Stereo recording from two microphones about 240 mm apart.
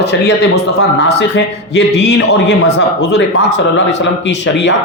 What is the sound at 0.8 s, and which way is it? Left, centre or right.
A man's voice, left.